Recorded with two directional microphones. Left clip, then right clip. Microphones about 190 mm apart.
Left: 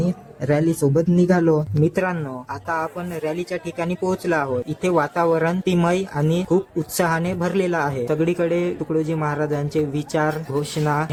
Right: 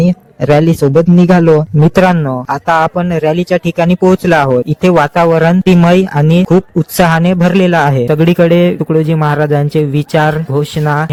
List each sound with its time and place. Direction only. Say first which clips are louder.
0.0 s a man's voice: right 12 dB; 45° right (ahead or behind)